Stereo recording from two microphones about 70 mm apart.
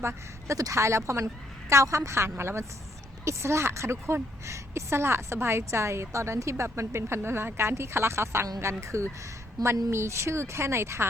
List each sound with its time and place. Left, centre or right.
0.0 s a woman's voice: right
9.6 s a woman's voice: right
9.9 s a woman's voice: right